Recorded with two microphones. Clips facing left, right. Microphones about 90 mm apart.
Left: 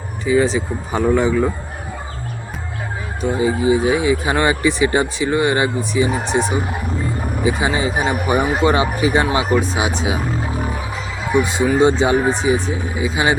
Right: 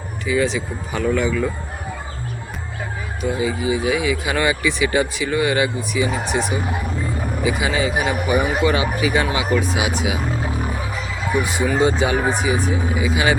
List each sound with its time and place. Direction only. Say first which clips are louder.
0.3 s speech: left 4 dB; 35° left (ahead or behind)
3.2 s speech: left 4 dB; 35° left (ahead or behind)
11.4 s speech: left 3 dB; 25° left (ahead or behind)